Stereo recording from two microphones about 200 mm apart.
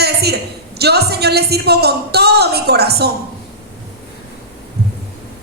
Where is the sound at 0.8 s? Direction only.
55° right (ahead or behind).